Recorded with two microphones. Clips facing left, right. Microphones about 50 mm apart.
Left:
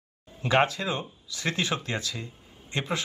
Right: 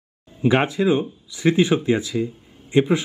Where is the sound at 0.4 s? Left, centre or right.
Centre.